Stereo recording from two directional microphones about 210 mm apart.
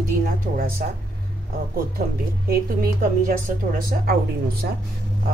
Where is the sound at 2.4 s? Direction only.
45° right (ahead or behind).